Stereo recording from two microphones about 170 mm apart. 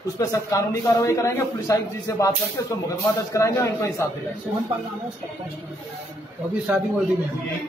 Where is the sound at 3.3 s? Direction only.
15° left (ahead or behind).